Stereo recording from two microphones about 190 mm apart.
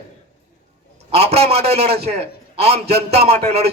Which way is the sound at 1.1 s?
35° right (ahead or behind).